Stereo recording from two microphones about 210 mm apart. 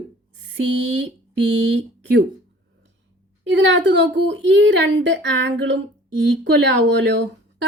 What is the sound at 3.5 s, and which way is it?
A woman's voice, 60° right (ahead or behind).